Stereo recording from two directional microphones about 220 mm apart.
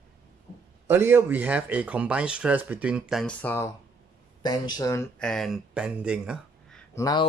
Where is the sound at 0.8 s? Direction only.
10° right (ahead or behind); by 5.0 s 15° left (ahead or behind).